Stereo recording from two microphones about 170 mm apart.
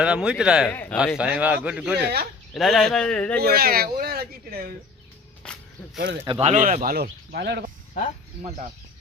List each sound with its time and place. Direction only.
0.0 s speech: 5° right (ahead or behind)
0.7 s speech: 10° left (ahead or behind)
0.9 s a man's voice: 5° right (ahead or behind)
2.0 s speech: 70° right (ahead or behind)
2.5 s speech: centre (ahead or behind)
3.4 s speech: 65° right (ahead or behind)
5.4 s snake: 5° left (ahead or behind)
6.2 s speech: 30° right (ahead or behind)
6.5 s speech: 45° right (ahead or behind); by 7.6 s 75° right (ahead or behind)